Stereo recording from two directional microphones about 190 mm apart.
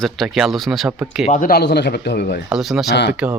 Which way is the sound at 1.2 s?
45° left (ahead or behind).